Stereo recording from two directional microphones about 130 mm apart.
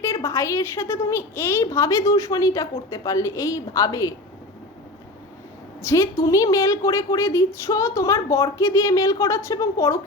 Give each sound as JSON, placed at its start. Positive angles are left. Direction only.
{"t": 0.0, "sound": "a woman's voice", "side_deg": 20}
{"t": 5.8, "sound": "a woman's voice", "side_deg": 25}